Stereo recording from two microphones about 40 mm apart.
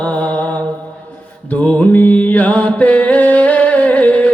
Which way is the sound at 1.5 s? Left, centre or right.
Left.